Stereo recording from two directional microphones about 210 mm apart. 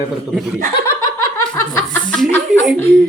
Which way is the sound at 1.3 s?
15° left (ahead or behind).